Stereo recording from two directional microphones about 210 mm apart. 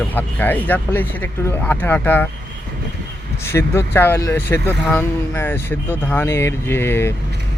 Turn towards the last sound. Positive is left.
turn(degrees=10)  # may be behind; listen again after turning